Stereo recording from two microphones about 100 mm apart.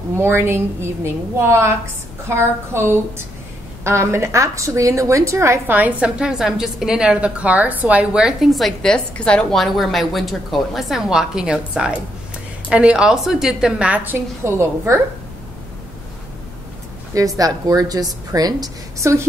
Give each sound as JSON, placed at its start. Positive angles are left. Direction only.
{"t": 0.2, "sound": "a woman's voice", "side_deg": -25}
{"t": 17.1, "sound": "speech", "side_deg": -35}